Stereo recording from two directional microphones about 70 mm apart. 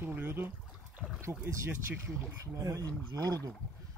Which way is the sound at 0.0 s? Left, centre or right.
Right.